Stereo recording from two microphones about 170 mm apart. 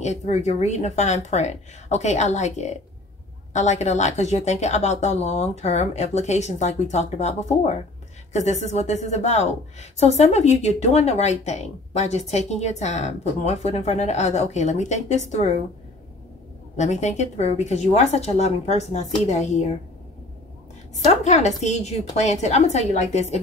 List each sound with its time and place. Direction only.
0.0 s a woman's voice: 40° left (ahead or behind)
16.7 s a woman's voice: 45° left (ahead or behind)
21.1 s a woman's voice: 40° left (ahead or behind)